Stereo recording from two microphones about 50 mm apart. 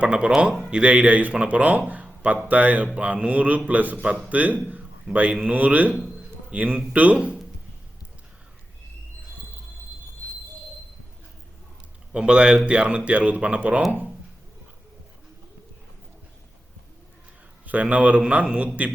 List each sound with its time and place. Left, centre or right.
0.0 s a man's voice: right
12.1 s speech: centre
17.7 s speech: right